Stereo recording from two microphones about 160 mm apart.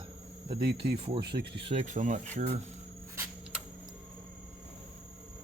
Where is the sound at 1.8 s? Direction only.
50° right (ahead or behind).